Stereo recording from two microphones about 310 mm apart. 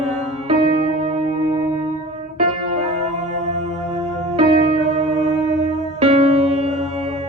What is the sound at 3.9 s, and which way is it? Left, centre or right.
Music, right.